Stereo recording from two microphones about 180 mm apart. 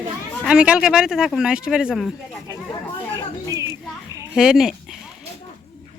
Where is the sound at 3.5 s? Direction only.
20° right (ahead or behind).